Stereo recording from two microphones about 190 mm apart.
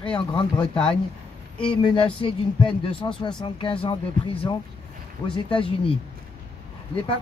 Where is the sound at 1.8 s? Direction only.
25° left (ahead or behind).